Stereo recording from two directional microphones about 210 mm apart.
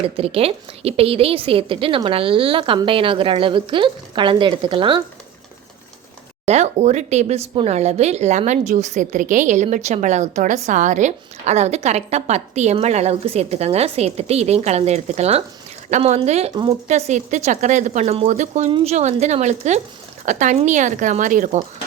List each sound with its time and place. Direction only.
0.0 s a woman's voice: 25° right (ahead or behind)
6.4 s speech: 30° right (ahead or behind)